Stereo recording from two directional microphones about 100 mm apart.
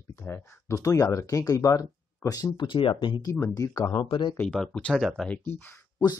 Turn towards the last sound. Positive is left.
turn(degrees=0)  # may be behind; listen again after turning